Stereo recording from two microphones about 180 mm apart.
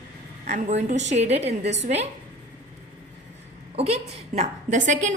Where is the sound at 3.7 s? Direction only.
35° right (ahead or behind).